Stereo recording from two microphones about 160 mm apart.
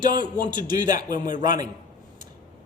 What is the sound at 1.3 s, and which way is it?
Speech, 25° right (ahead or behind).